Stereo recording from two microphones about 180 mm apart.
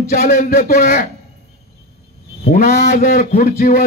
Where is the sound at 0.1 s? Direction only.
55° left (ahead or behind).